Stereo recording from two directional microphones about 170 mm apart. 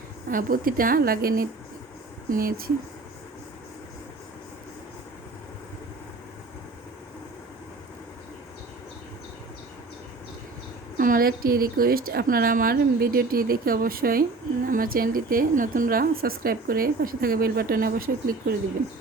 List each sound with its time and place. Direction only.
0.3 s a woman's voice: 55° right (ahead or behind)
10.9 s a woman's voice: 55° right (ahead or behind)